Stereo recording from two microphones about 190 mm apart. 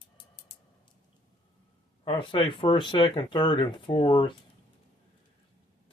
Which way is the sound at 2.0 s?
30° left (ahead or behind).